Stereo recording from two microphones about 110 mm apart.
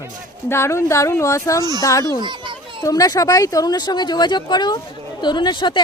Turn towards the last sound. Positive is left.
turn(degrees=45)  # may be behind; listen again after turning